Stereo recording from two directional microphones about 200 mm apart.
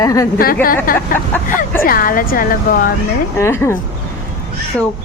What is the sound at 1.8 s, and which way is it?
Speech, 45° left (ahead or behind).